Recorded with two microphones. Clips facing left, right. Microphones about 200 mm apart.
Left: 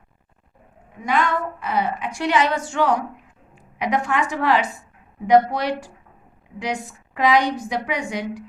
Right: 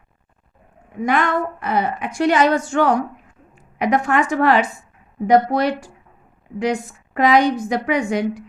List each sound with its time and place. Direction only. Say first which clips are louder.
1.0 s a woman's voice: right 3 dB; 50° right (ahead or behind)